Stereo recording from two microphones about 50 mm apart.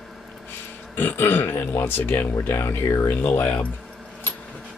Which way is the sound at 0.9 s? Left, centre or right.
Left.